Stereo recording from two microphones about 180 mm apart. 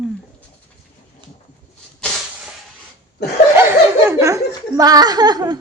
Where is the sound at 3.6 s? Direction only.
15° right (ahead or behind).